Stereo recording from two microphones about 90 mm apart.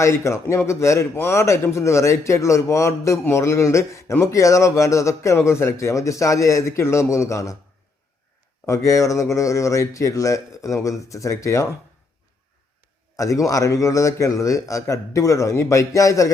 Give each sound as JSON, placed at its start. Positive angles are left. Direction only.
{"t": 0.0, "sound": "a man's voice", "side_deg": 30}
{"t": 8.6, "sound": "a man's voice", "side_deg": 35}
{"t": 13.1, "sound": "a man's voice", "side_deg": 35}